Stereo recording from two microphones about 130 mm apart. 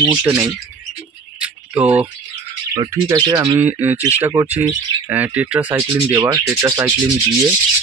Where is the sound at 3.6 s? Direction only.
15° right (ahead or behind).